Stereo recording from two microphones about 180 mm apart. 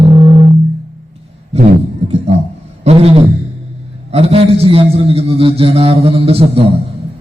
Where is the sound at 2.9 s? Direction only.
35° right (ahead or behind).